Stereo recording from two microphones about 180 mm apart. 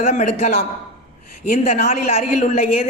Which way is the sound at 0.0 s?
40° left (ahead or behind).